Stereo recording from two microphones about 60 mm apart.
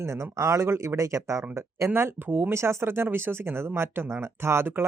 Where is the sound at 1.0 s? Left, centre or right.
Right.